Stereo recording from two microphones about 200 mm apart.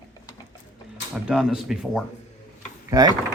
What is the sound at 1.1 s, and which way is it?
Speech, 5° right (ahead or behind).